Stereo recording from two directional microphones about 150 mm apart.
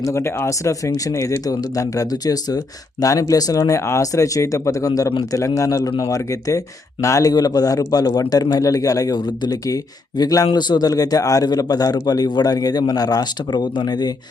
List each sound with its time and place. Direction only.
0.0 s speech: 20° left (ahead or behind)